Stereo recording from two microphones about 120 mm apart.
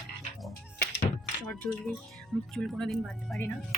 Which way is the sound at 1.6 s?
15° left (ahead or behind).